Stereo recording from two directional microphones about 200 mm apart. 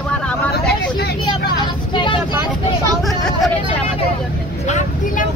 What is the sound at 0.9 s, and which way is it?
Vehicle, 55° left (ahead or behind).